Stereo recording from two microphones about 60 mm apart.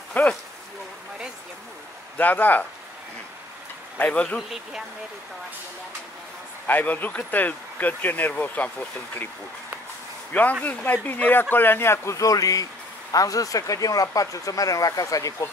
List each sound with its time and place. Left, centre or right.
0.2 s speech: left
2.1 s speech: left
4.1 s speech: left
6.7 s speech: left
10.6 s speech: left
12.2 s speech: left